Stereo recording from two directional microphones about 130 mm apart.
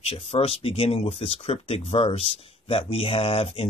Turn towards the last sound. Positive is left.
turn(degrees=50)  # may be behind; listen again after turning